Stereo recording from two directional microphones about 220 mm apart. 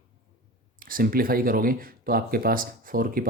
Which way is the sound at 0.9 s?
40° right (ahead or behind).